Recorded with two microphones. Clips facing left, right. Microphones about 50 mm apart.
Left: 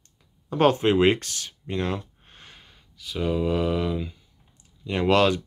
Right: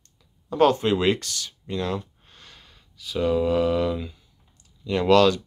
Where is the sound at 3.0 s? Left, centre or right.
Centre.